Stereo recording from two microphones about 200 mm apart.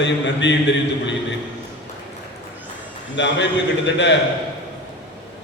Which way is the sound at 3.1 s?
65° left (ahead or behind).